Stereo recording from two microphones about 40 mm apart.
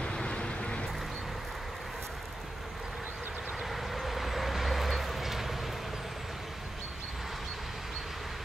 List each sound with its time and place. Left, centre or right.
0.0 s vehicle: left
3.6 s vehicle: centre